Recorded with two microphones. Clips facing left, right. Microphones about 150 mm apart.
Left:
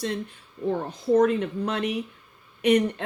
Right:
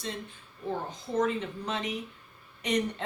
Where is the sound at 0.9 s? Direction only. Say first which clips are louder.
Left 10 dB; 60° left (ahead or behind).